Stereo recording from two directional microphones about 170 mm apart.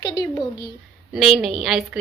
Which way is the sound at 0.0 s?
25° left (ahead or behind).